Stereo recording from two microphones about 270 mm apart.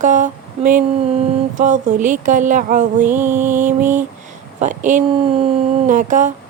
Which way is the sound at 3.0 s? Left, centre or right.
Centre.